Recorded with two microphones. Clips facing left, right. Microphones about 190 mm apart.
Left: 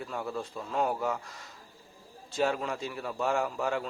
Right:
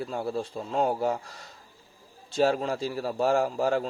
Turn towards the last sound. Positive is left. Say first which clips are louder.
# right 5 dB
turn(degrees=-35)  # may be behind; listen again after turning